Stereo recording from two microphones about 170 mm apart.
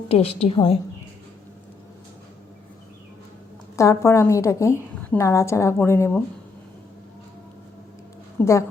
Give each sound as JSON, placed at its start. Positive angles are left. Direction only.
{"t": 0.1, "sound": "a woman's voice", "side_deg": 35}
{"t": 3.8, "sound": "a woman's voice", "side_deg": 15}
{"t": 8.4, "sound": "a woman's voice", "side_deg": 10}